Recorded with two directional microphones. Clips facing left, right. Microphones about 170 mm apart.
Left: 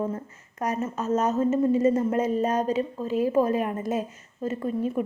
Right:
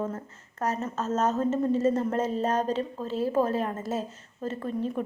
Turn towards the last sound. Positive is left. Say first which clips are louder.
# left 3 dB
turn(degrees=10)  # may be behind; listen again after turning